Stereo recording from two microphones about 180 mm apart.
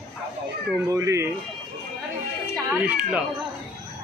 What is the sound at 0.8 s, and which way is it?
Speech, 15° right (ahead or behind).